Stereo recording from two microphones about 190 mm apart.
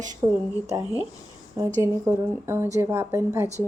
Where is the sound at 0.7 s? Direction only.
15° right (ahead or behind).